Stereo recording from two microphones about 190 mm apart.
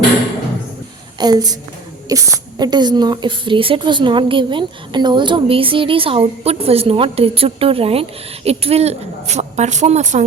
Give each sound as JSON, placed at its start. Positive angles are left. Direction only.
{"t": 1.2, "sound": "a woman's voice", "side_deg": -20}